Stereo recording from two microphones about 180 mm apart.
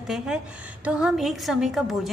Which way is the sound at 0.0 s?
Centre (ahead or behind).